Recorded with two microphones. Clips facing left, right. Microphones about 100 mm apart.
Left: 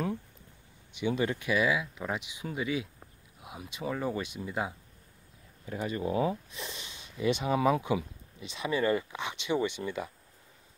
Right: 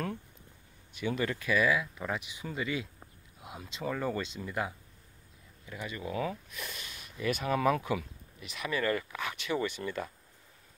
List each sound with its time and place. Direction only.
0.9 s speech: 20° left (ahead or behind)
5.7 s speech: 35° left (ahead or behind); by 10.1 s 15° left (ahead or behind)